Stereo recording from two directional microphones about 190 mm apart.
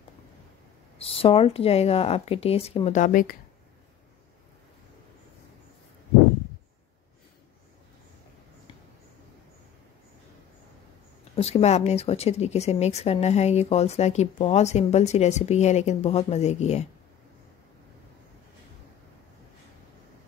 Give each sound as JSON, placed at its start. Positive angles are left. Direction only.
{"t": 0.9, "sound": "speech", "side_deg": 30}
{"t": 11.3, "sound": "speech", "side_deg": 35}